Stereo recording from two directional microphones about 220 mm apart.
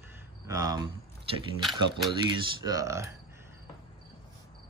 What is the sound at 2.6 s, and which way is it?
Speech, 15° right (ahead or behind).